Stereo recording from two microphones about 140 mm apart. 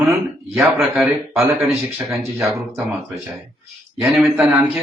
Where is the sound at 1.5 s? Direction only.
20° right (ahead or behind).